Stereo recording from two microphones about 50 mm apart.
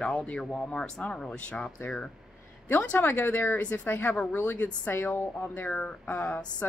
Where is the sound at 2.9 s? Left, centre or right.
Left.